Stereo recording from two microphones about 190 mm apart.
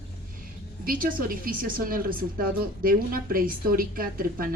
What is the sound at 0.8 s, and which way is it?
A woman's voice, 50° right (ahead or behind).